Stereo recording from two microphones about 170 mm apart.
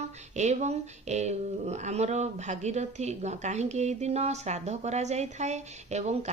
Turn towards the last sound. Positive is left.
turn(degrees=-40)  # may be behind; listen again after turning